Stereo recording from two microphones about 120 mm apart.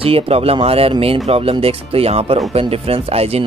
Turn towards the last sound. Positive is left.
turn(degrees=-55)  # may be behind; listen again after turning